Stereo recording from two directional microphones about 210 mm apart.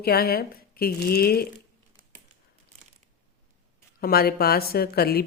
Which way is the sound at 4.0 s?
45° left (ahead or behind).